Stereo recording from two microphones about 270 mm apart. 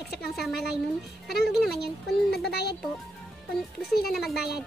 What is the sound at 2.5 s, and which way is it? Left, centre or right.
Speech, left.